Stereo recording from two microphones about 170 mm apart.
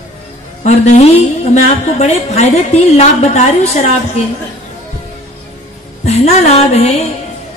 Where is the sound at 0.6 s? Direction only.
40° left (ahead or behind).